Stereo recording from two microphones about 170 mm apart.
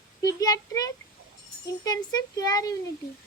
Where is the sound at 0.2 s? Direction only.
20° left (ahead or behind).